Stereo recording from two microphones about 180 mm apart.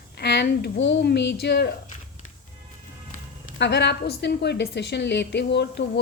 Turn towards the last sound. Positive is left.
turn(degrees=70)  # may be behind; listen again after turning